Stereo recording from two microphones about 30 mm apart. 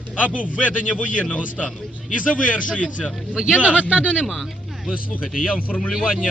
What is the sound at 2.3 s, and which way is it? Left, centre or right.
Speech, left.